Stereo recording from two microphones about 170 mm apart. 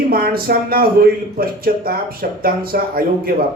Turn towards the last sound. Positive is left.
turn(degrees=-60)  # may be behind; listen again after turning